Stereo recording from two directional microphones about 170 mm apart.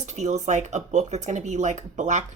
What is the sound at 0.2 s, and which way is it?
Speech, 45° right (ahead or behind).